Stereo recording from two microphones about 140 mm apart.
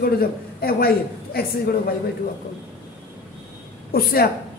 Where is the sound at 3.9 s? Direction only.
90° left.